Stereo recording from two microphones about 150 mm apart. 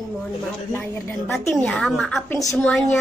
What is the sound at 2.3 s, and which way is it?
Speech, 20° left (ahead or behind).